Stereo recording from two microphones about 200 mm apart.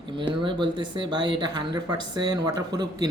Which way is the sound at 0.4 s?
25° right (ahead or behind).